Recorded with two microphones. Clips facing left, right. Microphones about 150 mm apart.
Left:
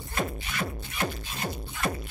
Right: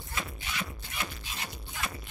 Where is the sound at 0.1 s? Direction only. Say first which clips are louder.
Left 6 dB; 50° left (ahead or behind).